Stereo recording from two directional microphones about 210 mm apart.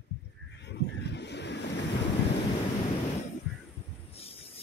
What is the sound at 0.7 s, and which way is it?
Vehicle, 55° left (ahead or behind).